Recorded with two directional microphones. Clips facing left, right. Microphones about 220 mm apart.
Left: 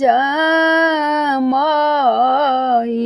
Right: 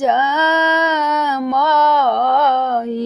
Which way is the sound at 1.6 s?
15° left (ahead or behind).